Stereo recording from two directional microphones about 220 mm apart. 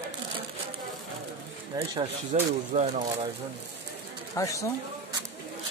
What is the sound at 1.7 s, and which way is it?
Speech, 20° right (ahead or behind).